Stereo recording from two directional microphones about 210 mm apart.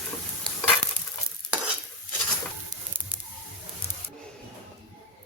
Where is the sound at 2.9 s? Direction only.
10° right (ahead or behind).